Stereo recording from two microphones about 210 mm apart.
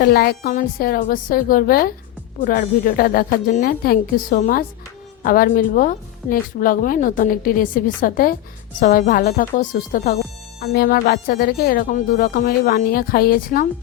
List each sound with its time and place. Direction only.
0.0 s a woman's voice: 45° left (ahead or behind)